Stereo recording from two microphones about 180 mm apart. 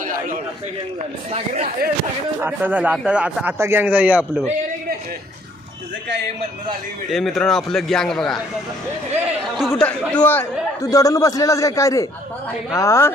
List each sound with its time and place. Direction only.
2.4 s a man's voice: 10° right (ahead or behind)
7.1 s a man's voice: centre (ahead or behind)